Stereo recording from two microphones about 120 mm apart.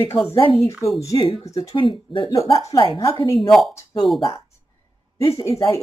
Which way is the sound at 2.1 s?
50° left (ahead or behind).